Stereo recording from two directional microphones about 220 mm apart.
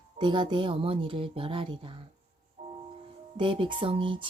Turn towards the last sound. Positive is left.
turn(degrees=-25)  # may be behind; listen again after turning